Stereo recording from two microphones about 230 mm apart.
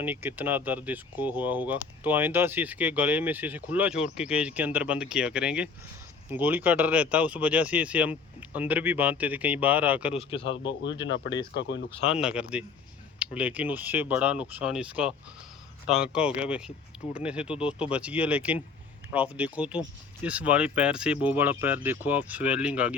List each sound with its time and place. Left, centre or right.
0.0 s speech: centre
10.2 s speech: left
10.6 s speech: left
12.0 s speech: centre